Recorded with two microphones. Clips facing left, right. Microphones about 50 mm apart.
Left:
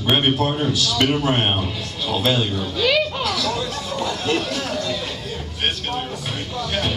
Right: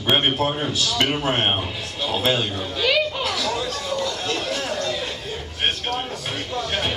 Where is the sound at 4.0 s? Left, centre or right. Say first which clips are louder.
Left 5 dB; centre.